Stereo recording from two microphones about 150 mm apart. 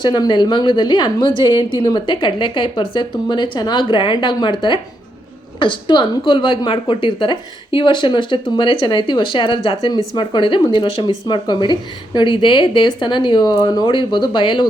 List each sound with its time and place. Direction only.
0.0 s a woman's voice: 30° left (ahead or behind)